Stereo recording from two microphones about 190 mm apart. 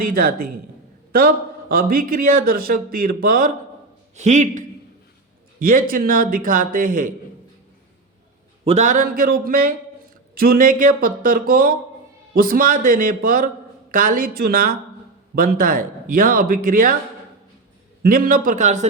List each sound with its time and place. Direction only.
0.1 s speech: 50° right (ahead or behind)
1.7 s a man's voice: 50° right (ahead or behind)
5.6 s speech: 50° right (ahead or behind)
8.6 s speech: 35° right (ahead or behind)
18.0 s speech: 50° right (ahead or behind)